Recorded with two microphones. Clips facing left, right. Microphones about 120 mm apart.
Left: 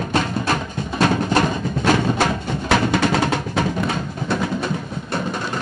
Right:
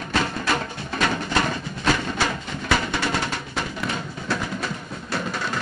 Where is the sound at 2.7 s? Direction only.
65° left (ahead or behind).